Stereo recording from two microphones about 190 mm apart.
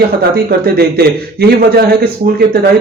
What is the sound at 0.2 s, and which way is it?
A man's voice, 55° right (ahead or behind).